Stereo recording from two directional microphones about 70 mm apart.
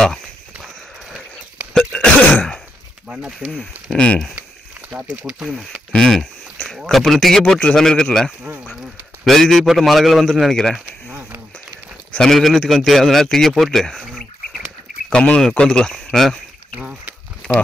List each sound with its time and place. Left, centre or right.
1.7 s cough: centre
2.0 s throat clearing: left
3.1 s speech: centre
3.3 s a man's voice: centre
3.9 s speech: centre
5.1 s speech: centre
5.9 s a sound: centre
6.9 s a man's voice: centre
15.1 s speech: centre